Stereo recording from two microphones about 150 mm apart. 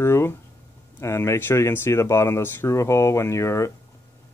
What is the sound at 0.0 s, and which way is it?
Speech, 15° left (ahead or behind).